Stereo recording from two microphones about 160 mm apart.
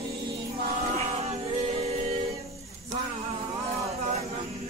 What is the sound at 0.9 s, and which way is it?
Music, 40° right (ahead or behind).